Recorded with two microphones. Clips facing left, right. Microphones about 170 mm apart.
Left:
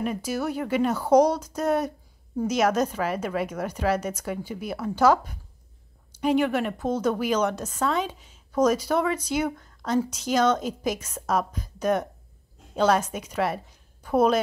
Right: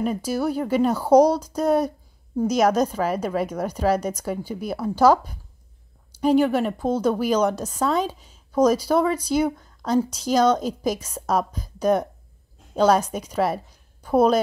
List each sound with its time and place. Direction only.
0.0 s a woman's voice: 35° right (ahead or behind)